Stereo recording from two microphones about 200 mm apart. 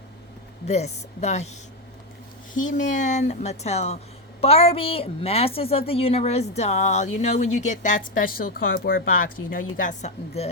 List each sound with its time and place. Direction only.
0.7 s speech: 35° left (ahead or behind)
2.6 s a woman's voice: 40° left (ahead or behind)